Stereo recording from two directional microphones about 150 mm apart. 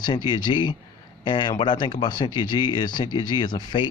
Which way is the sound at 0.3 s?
30° left (ahead or behind).